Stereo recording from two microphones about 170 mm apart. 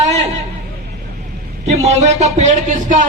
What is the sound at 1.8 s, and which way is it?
A man's voice, 40° right (ahead or behind).